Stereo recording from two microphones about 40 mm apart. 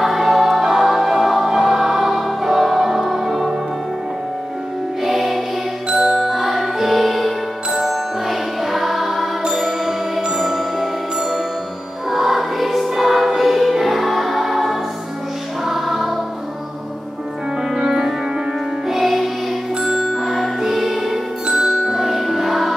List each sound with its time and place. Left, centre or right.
0.0 s choir: centre
5.0 s music: centre
5.9 s music: centre
12.1 s music: centre
17.6 s music: centre
21.5 s music: centre
22.1 s music: centre